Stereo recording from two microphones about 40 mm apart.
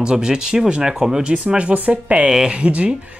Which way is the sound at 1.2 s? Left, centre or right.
Right.